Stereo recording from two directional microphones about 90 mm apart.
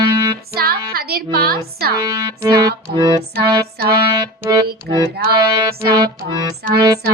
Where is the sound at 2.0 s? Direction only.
50° right (ahead or behind).